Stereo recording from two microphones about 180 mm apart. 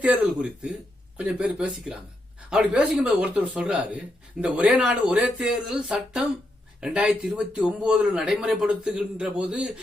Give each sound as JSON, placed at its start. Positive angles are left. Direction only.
{"t": 0.0, "sound": "speech", "side_deg": -5}